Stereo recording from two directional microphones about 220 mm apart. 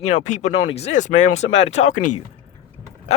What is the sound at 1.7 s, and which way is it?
Speech, 30° left (ahead or behind).